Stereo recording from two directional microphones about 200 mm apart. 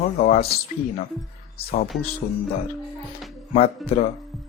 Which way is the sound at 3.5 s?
30° left (ahead or behind).